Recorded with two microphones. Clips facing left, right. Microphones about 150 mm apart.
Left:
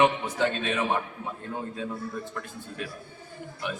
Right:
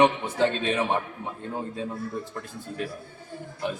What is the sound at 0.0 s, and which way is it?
Speech, 30° right (ahead or behind).